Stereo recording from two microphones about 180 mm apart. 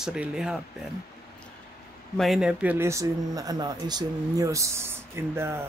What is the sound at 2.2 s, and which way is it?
Speech, centre (ahead or behind).